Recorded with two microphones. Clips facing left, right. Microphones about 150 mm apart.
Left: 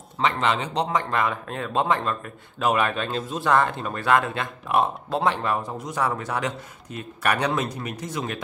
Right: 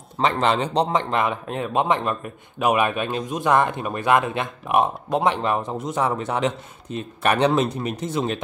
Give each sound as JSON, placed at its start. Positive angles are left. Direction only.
{"t": 0.2, "sound": "speech", "side_deg": -35}
{"t": 1.1, "sound": "speech", "side_deg": -20}